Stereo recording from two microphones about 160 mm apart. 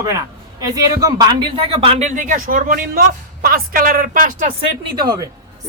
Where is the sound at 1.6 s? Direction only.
35° right (ahead or behind); by 4.5 s 55° right (ahead or behind).